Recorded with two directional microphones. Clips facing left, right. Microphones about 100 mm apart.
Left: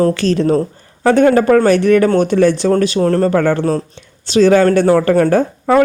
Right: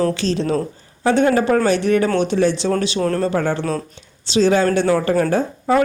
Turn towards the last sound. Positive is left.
turn(degrees=55)  # may be behind; listen again after turning